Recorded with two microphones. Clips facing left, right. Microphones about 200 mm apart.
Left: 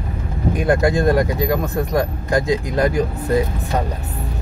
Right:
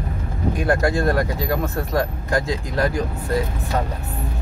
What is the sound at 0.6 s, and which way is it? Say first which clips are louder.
Speech: left 4 dB; 20° left (ahead or behind).